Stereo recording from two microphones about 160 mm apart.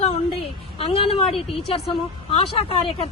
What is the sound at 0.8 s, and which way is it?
A woman's voice, 40° left (ahead or behind).